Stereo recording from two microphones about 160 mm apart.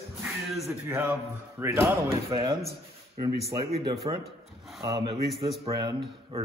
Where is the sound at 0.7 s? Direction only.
15° right (ahead or behind).